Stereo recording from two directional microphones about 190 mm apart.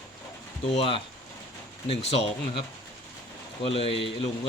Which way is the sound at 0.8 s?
25° left (ahead or behind).